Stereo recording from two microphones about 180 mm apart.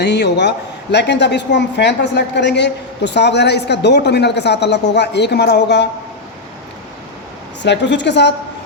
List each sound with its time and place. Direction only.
0.0 s a woman's voice: 70° left (ahead or behind)
7.6 s a woman's voice: 75° left (ahead or behind)